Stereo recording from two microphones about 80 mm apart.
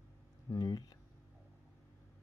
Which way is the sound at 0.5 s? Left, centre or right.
Left.